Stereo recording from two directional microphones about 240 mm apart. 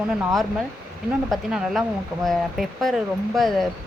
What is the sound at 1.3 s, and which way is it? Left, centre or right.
Speech, centre.